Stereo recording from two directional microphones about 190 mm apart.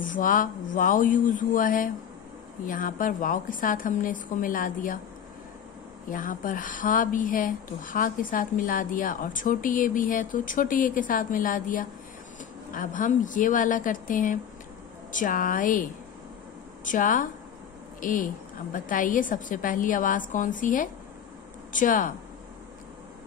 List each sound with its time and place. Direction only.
0.0 s a woman's voice: 45° left (ahead or behind)
6.0 s a woman's voice: 45° left (ahead or behind)